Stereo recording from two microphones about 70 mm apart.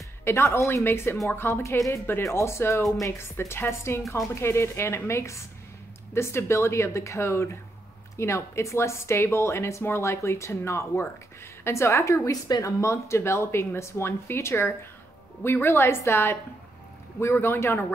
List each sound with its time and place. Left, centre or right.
0.2 s a woman's voice: left
12.3 s speech: left
12.8 s a woman's voice: left